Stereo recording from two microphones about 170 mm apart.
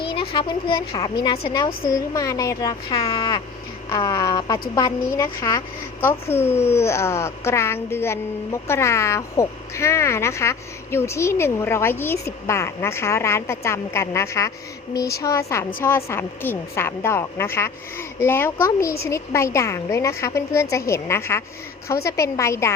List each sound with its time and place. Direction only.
0.0 s a woman's voice: 30° left (ahead or behind)